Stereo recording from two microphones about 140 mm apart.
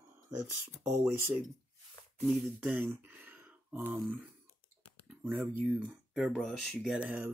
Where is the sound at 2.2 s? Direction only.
15° right (ahead or behind).